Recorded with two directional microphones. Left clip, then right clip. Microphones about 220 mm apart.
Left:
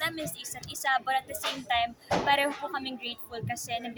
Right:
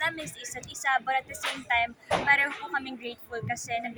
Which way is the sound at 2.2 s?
25° left (ahead or behind).